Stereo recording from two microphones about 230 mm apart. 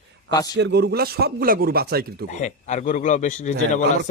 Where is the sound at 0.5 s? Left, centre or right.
Right.